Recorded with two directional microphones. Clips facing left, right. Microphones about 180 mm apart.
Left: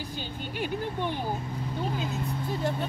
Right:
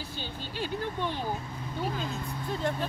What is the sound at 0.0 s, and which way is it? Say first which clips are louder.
Speech: left 3 dB; 15° left (ahead or behind).